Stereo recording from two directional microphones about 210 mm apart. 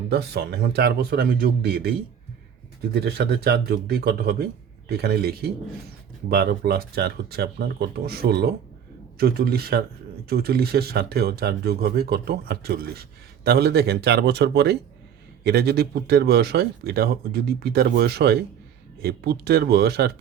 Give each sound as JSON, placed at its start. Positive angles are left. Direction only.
{"t": 0.1, "sound": "speech", "side_deg": -50}